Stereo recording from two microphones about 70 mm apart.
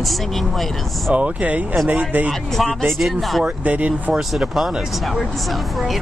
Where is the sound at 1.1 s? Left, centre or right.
Centre.